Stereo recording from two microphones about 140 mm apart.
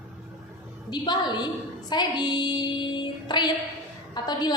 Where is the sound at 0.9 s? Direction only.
30° left (ahead or behind).